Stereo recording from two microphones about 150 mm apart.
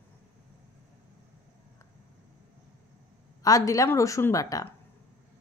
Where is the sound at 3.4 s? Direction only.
25° left (ahead or behind).